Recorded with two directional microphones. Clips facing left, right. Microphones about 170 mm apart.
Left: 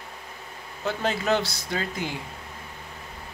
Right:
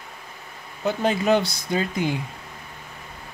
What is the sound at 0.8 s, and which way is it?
Speech, 15° right (ahead or behind).